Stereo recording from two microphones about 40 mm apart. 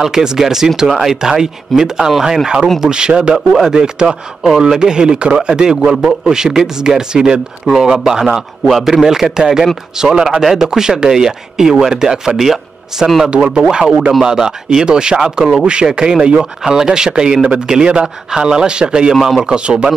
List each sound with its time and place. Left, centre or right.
0.0 s a man's voice: centre
3.3 s a man's voice: centre
3.7 s speech: right
4.4 s a man's voice: centre
15.6 s speech: right
19.1 s a man's voice: centre
19.4 s speech: right